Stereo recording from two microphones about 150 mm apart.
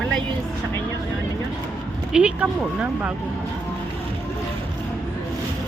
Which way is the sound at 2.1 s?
10° right (ahead or behind).